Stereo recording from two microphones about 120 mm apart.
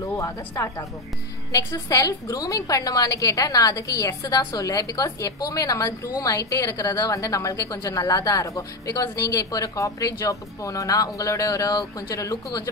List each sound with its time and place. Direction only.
0.0 s a woman's voice: 30° left (ahead or behind)